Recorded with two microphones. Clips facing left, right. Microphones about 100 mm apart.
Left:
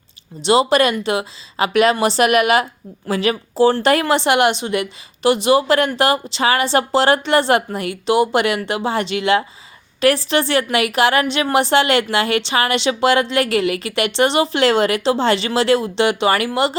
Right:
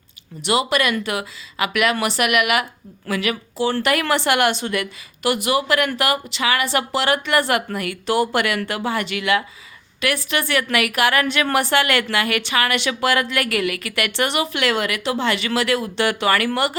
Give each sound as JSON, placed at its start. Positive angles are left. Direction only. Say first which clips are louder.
{"t": 0.4, "sound": "a woman's voice", "louder": "left 6 dB", "side_deg": 30}
{"t": 4.0, "sound": "a woman's voice", "louder": "left 3 dB", "side_deg": 20}